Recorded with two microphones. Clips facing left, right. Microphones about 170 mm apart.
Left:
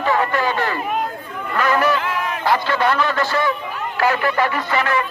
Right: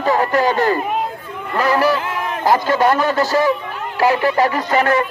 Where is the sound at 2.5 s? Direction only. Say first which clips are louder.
Right 4 dB; 40° right (ahead or behind).